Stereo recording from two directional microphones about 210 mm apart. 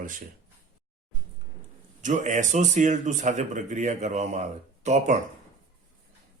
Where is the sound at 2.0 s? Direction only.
35° right (ahead or behind).